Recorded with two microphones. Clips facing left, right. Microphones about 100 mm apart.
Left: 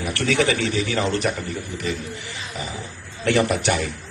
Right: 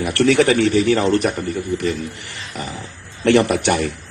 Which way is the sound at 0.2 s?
60° right (ahead or behind).